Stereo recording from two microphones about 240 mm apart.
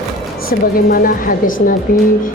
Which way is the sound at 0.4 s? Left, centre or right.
Left.